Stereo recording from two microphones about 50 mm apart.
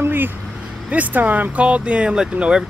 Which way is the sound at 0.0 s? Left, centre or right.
Right.